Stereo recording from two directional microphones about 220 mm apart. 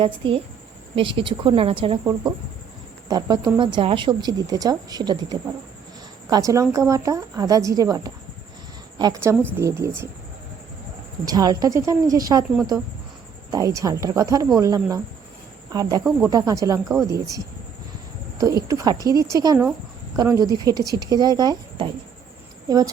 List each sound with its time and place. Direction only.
0.0 s a woman's voice: 25° right (ahead or behind)
11.3 s speech: 15° right (ahead or behind)
13.5 s speech: 15° right (ahead or behind)